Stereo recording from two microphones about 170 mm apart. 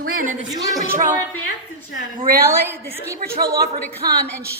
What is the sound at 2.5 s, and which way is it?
Speech, 15° right (ahead or behind).